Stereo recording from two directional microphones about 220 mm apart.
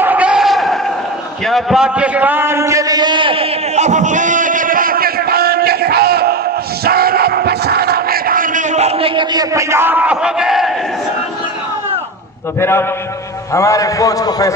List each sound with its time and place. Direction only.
0.0 s a sound: 5° right (ahead or behind); by 6.3 s 45° right (ahead or behind)
6.8 s battle cry: 45° right (ahead or behind); by 10.7 s centre (ahead or behind)
12.5 s a man's voice: 10° left (ahead or behind)